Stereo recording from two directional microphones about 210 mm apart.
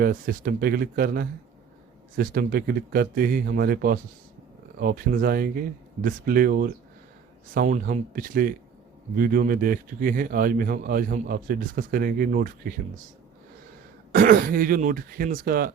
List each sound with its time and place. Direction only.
0.0 s a man's voice: 45° right (ahead or behind)
14.1 s speech: 40° right (ahead or behind)